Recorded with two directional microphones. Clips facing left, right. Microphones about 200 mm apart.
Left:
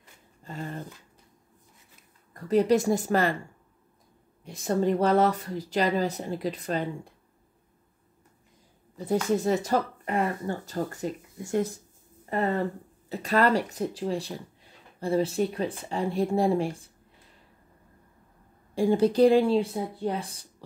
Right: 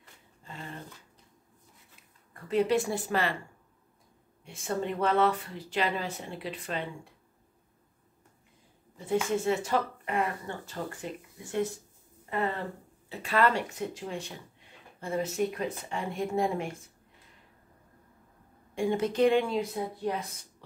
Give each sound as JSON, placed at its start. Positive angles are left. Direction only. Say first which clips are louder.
{"t": 0.4, "sound": "a sound", "louder": "left 7 dB", "side_deg": 45}
{"t": 2.3, "sound": "speech", "louder": "left 4 dB", "side_deg": 40}
{"t": 4.5, "sound": "speech", "louder": "left 7 dB", "side_deg": 40}
{"t": 8.9, "sound": "speech", "louder": "left 3 dB", "side_deg": 40}
{"t": 18.8, "sound": "speech", "louder": "left 5 dB", "side_deg": 35}